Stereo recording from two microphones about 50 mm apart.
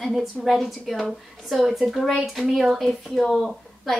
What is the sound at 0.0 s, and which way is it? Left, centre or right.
Speech, centre.